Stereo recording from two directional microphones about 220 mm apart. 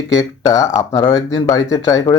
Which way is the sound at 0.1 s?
15° left (ahead or behind).